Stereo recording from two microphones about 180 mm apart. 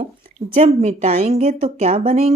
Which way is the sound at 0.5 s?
35° right (ahead or behind).